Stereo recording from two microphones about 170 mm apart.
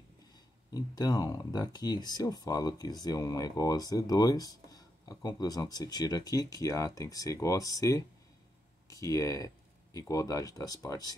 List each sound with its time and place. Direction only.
0.7 s speech: 20° left (ahead or behind)